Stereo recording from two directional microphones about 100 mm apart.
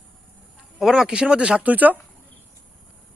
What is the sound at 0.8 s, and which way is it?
Speech, 5° right (ahead or behind).